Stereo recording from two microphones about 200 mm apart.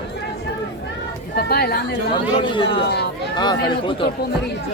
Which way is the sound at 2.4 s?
25° left (ahead or behind).